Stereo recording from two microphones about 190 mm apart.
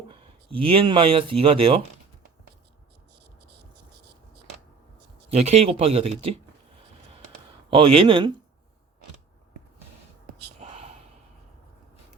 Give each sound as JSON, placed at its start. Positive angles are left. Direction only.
{"t": 0.1, "sound": "speech", "side_deg": -30}
{"t": 5.3, "sound": "speech", "side_deg": -35}
{"t": 7.7, "sound": "speech", "side_deg": -30}
{"t": 10.6, "sound": "gasp", "side_deg": -35}